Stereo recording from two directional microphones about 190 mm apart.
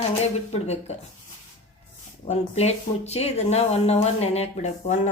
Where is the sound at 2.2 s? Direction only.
35° left (ahead or behind).